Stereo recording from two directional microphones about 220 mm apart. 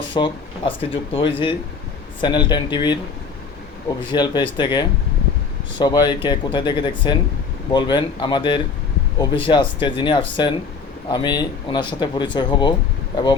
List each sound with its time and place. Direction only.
0.1 s speech: 25° left (ahead or behind)
4.1 s speech: 20° left (ahead or behind)